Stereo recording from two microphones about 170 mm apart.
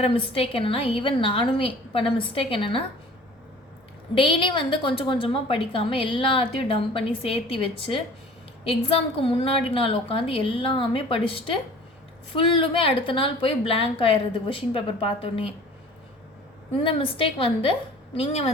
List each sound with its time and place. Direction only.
0.0 s a woman's voice: 35° left (ahead or behind)
4.1 s a woman's voice: 30° left (ahead or behind)
16.8 s a woman's voice: 30° left (ahead or behind)